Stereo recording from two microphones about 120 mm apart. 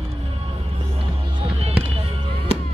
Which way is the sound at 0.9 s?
50° right (ahead or behind).